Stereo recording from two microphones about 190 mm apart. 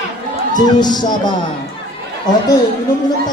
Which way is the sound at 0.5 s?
20° left (ahead or behind).